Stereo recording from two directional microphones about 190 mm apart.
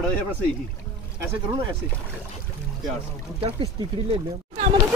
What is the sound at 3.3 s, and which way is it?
Speech, 30° right (ahead or behind).